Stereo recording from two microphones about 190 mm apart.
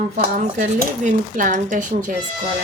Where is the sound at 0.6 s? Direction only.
45° right (ahead or behind).